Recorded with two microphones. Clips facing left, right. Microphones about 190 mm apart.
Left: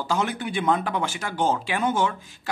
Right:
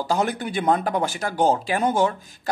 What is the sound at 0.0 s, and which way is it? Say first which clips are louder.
Speech: right 3 dB; 40° right (ahead or behind).